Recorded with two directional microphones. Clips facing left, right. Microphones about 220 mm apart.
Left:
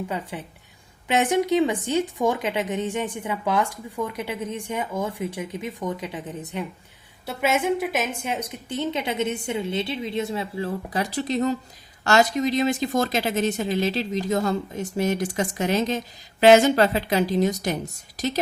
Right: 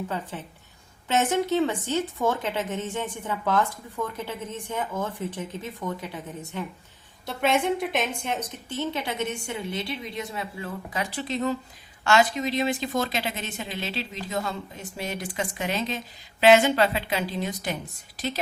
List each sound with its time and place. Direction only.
0.1 s speech: 15° left (ahead or behind)
7.3 s a woman's voice: 5° left (ahead or behind); by 17.7 s 40° left (ahead or behind)